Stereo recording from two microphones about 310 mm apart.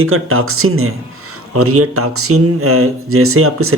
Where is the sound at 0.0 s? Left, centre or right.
Right.